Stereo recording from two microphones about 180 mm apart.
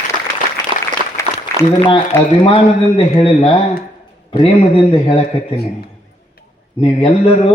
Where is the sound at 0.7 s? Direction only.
25° right (ahead or behind).